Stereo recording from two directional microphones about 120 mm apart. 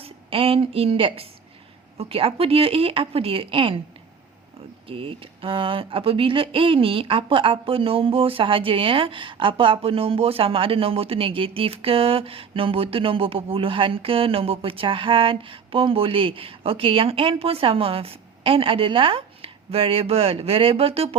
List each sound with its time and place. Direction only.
0.0 s a woman's voice: 50° right (ahead or behind)
4.9 s speech: 50° right (ahead or behind)